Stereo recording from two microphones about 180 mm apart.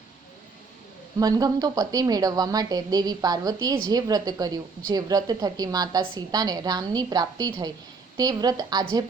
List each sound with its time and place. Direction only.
1.2 s a woman's voice: 20° right (ahead or behind)